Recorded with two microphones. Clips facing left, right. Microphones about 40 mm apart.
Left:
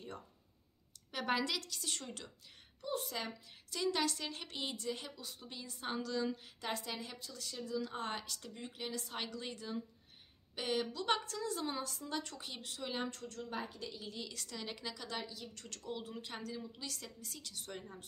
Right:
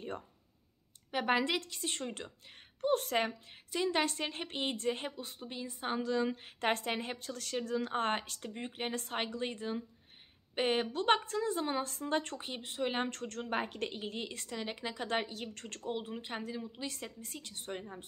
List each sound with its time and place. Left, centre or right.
1.1 s a woman's voice: right
3.7 s a woman's voice: right
15.0 s a woman's voice: right